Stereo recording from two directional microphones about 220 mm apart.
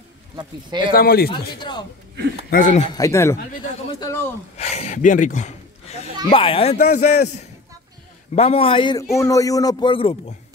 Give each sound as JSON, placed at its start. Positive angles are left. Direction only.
{"t": 0.4, "sound": "speech", "side_deg": -20}
{"t": 0.9, "sound": "speech", "side_deg": 45}
{"t": 1.6, "sound": "a man's voice", "side_deg": 20}
{"t": 2.5, "sound": "a man's voice", "side_deg": 35}
{"t": 2.9, "sound": "speech", "side_deg": 15}
{"t": 4.6, "sound": "a man's voice", "side_deg": 30}